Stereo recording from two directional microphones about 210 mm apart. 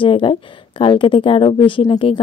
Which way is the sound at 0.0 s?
25° left (ahead or behind).